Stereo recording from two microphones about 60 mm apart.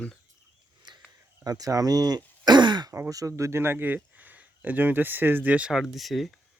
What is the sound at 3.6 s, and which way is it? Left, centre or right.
Speech, right.